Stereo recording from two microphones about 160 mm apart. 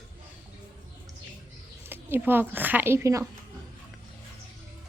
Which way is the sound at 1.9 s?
15° right (ahead or behind).